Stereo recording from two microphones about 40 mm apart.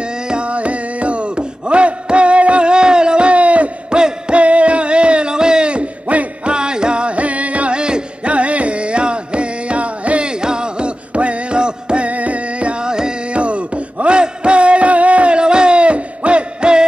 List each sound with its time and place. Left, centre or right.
0.0 s music: right
6.5 s music: right
7.7 s music: right
8.3 s music: right
12.1 s music: right; by 13.1 s centre
13.3 s a sound: right